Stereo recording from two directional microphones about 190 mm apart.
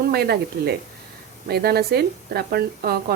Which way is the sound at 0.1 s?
55° right (ahead or behind).